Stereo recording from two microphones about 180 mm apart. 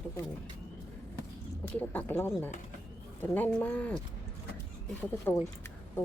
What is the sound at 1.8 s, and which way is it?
Speech, 10° left (ahead or behind).